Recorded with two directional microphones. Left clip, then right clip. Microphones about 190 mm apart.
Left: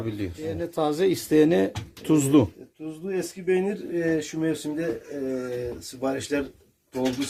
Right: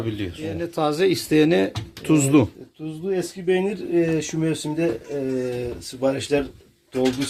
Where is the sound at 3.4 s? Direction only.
25° right (ahead or behind).